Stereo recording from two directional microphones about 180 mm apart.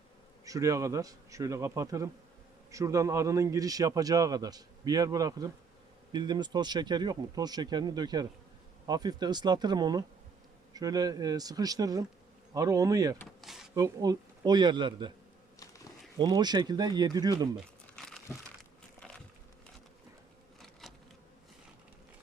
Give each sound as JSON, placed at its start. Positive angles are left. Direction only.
{"t": 0.4, "sound": "a man's voice", "side_deg": -20}
{"t": 13.1, "sound": "speech", "side_deg": 0}
{"t": 13.7, "sound": "a man's voice", "side_deg": -20}
{"t": 16.1, "sound": "a man's voice", "side_deg": -25}
{"t": 17.9, "sound": "crumpling", "side_deg": 5}
{"t": 18.9, "sound": "a sound", "side_deg": 5}
{"t": 20.8, "sound": "insect", "side_deg": 0}